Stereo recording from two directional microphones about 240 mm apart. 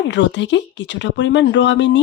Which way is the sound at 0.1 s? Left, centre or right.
Left.